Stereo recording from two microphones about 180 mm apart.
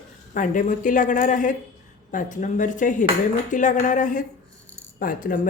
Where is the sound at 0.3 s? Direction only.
45° left (ahead or behind).